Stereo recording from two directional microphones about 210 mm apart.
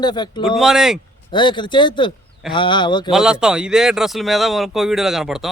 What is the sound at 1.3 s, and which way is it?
Speech, 20° left (ahead or behind).